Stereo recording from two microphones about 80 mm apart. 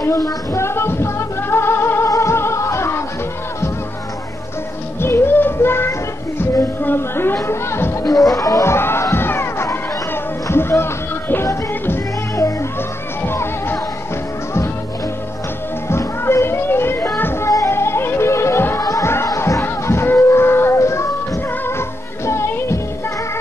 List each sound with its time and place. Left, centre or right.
0.0 s music: left
5.0 s music: left
8.0 s speech: left
8.7 s music: left
15.9 s music: left
18.8 s music: left
19.2 s a sound: left